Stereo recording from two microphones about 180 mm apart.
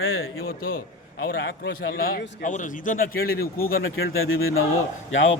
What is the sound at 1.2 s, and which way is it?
A man's voice, 65° left (ahead or behind).